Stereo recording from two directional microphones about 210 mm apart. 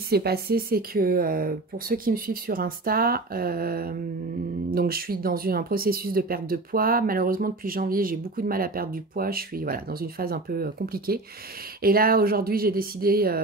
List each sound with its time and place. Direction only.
0.1 s speech: 50° right (ahead or behind)